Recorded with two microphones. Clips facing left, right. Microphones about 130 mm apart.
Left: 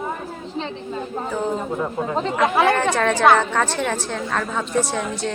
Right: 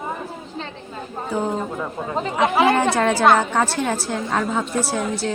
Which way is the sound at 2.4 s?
5° right (ahead or behind).